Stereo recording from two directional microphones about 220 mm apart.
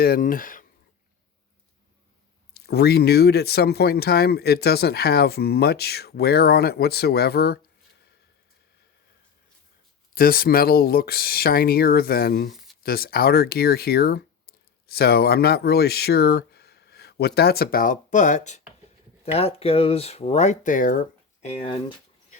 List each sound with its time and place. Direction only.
0.0 s speech: 40° left (ahead or behind)
2.5 s speech: 45° left (ahead or behind)
10.2 s speech: 40° left (ahead or behind)
21.4 s speech: 30° left (ahead or behind)